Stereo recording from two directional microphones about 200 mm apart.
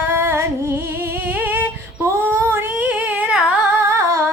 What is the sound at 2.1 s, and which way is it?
Singing, 10° right (ahead or behind).